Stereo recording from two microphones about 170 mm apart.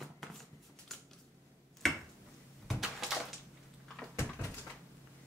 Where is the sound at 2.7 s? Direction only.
Centre (ahead or behind).